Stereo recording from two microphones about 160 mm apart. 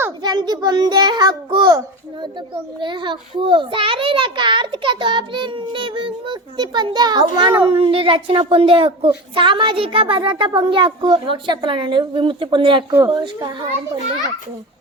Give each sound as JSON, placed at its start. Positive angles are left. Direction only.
{"t": 0.2, "sound": "a child's voice", "side_deg": -25}
{"t": 2.8, "sound": "a woman's voice", "side_deg": -30}